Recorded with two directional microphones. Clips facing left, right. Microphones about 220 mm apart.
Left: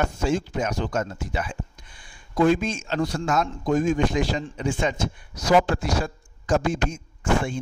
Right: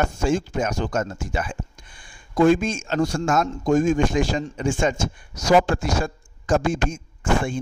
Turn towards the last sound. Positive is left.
turn(degrees=-50)  # may be behind; listen again after turning